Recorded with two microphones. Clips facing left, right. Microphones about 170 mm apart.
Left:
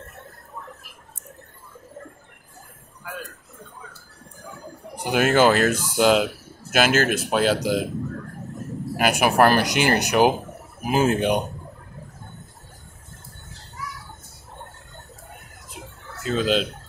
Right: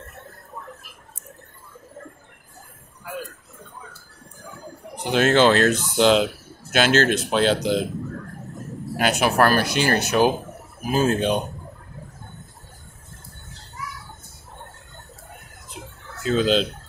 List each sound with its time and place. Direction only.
4.9 s speech: 10° left (ahead or behind)
8.9 s speech: 10° left (ahead or behind)
16.2 s speech: 5° left (ahead or behind)